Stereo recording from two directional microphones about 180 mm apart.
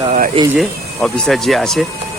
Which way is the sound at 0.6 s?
Centre (ahead or behind).